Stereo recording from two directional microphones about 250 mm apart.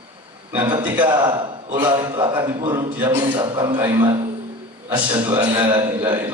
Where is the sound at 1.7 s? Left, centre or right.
Centre.